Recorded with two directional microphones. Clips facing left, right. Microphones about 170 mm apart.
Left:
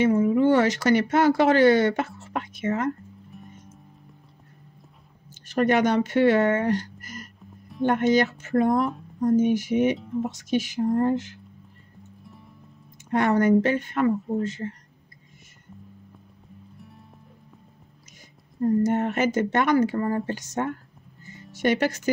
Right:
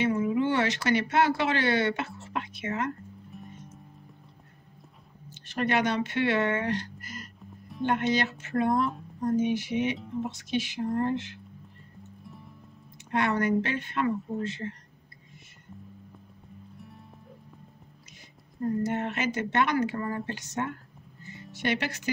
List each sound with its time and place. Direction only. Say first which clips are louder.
0.0 s speech: left 6 dB; 45° left (ahead or behind)
3.3 s music: right 1 dB; centre (ahead or behind)
5.5 s speech: left 6 dB; 45° left (ahead or behind)
12.2 s music: right 1 dB; centre (ahead or behind)
13.1 s speech: left 6 dB; 45° left (ahead or behind)
16.7 s music: right 1 dB; centre (ahead or behind)
18.8 s speech: left 7 dB; 45° left (ahead or behind)